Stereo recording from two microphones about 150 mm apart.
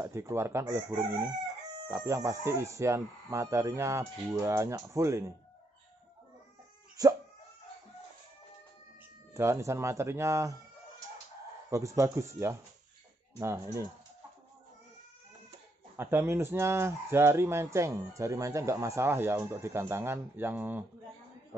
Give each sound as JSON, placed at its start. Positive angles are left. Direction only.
{"t": 0.0, "sound": "speech", "side_deg": -15}
{"t": 7.0, "sound": "dog", "side_deg": -25}
{"t": 9.3, "sound": "speech", "side_deg": -20}
{"t": 11.7, "sound": "speech", "side_deg": -20}
{"t": 16.0, "sound": "speech", "side_deg": -15}